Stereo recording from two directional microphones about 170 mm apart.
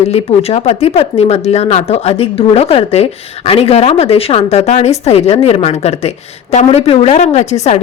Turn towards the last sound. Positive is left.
turn(degrees=40)  # may be behind; listen again after turning